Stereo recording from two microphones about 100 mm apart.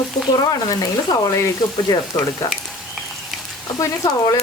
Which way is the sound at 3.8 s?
35° left (ahead or behind).